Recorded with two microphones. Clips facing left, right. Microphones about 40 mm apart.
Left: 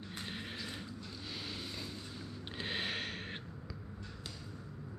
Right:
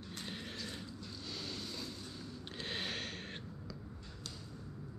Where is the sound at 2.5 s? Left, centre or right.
Centre.